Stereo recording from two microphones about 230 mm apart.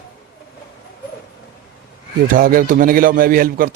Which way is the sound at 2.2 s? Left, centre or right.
Right.